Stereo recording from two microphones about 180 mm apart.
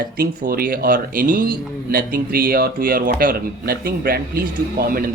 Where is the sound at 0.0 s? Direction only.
55° right (ahead or behind).